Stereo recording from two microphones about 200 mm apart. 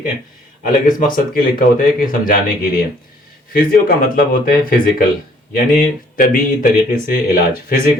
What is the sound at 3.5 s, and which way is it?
Speech, 45° left (ahead or behind).